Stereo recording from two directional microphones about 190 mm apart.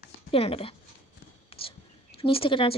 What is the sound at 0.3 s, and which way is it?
Speech, 30° left (ahead or behind).